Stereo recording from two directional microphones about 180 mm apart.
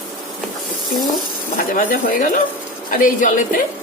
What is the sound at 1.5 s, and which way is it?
Speech, 50° left (ahead or behind).